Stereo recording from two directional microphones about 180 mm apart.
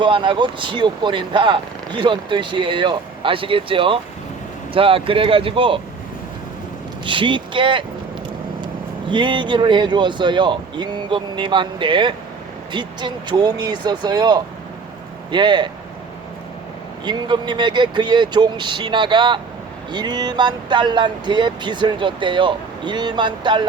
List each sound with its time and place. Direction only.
0.0 s speech: 25° right (ahead or behind)
7.0 s speech: 25° right (ahead or behind)
17.1 s speech: 25° right (ahead or behind)